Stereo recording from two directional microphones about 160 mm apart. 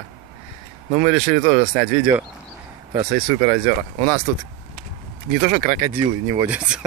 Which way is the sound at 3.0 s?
50° right (ahead or behind).